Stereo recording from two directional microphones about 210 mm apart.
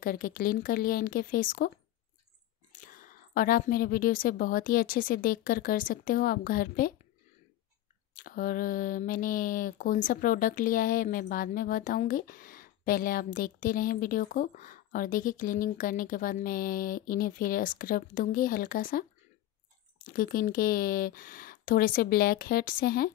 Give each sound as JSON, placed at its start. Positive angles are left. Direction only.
{"t": 0.0, "sound": "speech", "side_deg": 40}
{"t": 2.7, "sound": "speech", "side_deg": 40}
{"t": 8.1, "sound": "speech", "side_deg": 40}
{"t": 20.1, "sound": "speech", "side_deg": 40}